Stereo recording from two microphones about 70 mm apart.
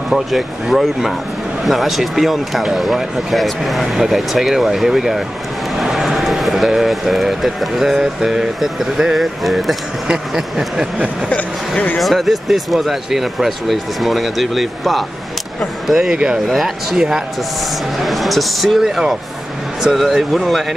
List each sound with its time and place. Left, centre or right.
0.1 s speech: centre
10.0 s a sound: centre
11.2 s speech: left
12.0 s speech: centre
15.9 s a sound: centre
16.4 s speech: centre